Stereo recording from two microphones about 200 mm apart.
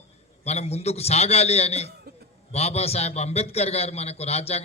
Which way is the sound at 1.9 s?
50° right (ahead or behind).